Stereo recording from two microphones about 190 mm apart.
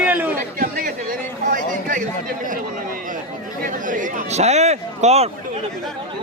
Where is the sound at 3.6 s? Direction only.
45° right (ahead or behind).